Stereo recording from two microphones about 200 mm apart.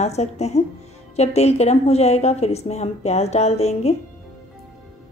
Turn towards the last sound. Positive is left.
turn(degrees=30)  # may be behind; listen again after turning